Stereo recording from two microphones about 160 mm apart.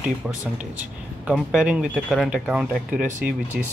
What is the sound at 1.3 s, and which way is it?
Speech, 5° right (ahead or behind).